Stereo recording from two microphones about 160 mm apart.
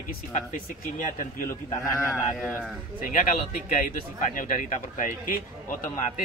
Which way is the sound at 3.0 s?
55° left (ahead or behind).